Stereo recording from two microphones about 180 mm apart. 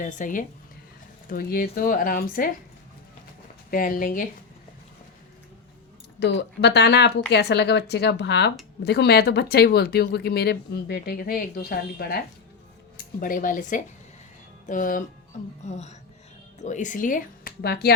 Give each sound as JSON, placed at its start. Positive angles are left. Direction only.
{"t": 0.0, "sound": "speech", "side_deg": 45}
{"t": 3.7, "sound": "speech", "side_deg": 50}
{"t": 6.1, "sound": "speech", "side_deg": 70}